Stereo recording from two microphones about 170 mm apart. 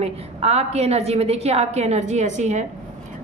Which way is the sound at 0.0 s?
40° right (ahead or behind).